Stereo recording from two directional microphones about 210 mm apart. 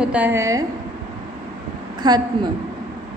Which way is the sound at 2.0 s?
20° right (ahead or behind).